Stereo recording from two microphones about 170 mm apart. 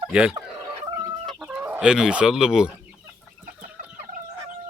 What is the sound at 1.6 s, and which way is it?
Speech, 10° right (ahead or behind).